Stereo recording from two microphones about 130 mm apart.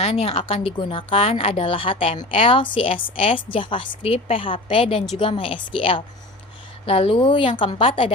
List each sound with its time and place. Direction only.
0.0 s a woman's voice: 50° left (ahead or behind)